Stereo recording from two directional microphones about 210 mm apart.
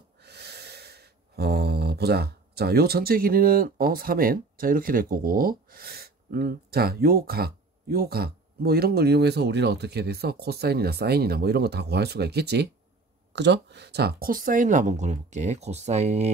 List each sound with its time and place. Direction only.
0.2 s gasp: 50° right (ahead or behind)
13.3 s speech: 55° right (ahead or behind); by 16.3 s 30° right (ahead or behind)